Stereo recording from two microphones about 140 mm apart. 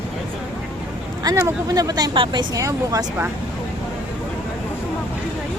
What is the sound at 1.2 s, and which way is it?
Speech, 20° right (ahead or behind).